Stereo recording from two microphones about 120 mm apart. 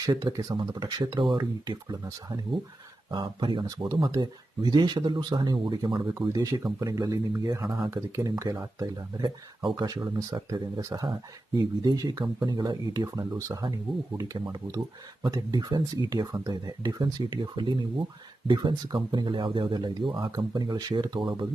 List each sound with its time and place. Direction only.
0.0 s speech: 35° right (ahead or behind)
6.1 s speech: 25° right (ahead or behind)